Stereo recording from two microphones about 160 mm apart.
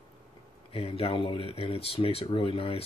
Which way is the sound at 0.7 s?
35° left (ahead or behind).